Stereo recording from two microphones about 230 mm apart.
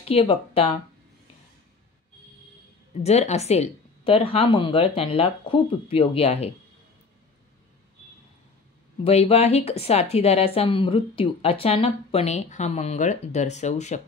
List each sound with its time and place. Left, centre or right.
0.0 s speech: left
3.0 s speech: left
9.0 s speech: left